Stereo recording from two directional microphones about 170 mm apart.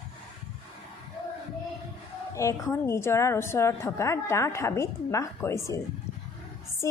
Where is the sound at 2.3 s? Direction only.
15° left (ahead or behind).